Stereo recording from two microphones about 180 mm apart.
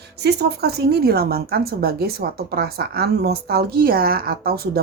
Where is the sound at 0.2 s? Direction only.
65° right (ahead or behind).